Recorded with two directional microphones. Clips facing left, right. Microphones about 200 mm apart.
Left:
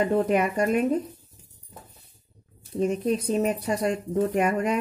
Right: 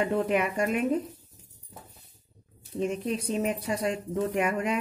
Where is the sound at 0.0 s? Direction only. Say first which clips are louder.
Left 4 dB; 40° left (ahead or behind).